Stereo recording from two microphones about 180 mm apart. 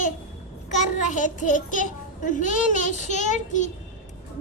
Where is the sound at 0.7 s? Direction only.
40° left (ahead or behind).